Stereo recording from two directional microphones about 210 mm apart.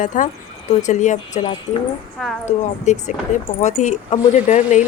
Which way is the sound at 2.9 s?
35° left (ahead or behind).